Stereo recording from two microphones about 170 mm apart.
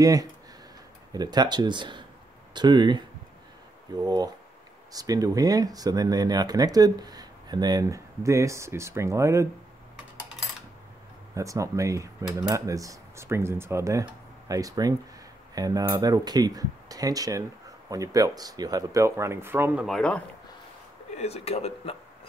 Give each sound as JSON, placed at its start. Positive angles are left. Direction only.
{"t": 0.0, "sound": "speech", "side_deg": -20}
{"t": 11.3, "sound": "speech", "side_deg": -20}
{"t": 20.0, "sound": "speech", "side_deg": 5}
{"t": 21.2, "sound": "speech", "side_deg": 40}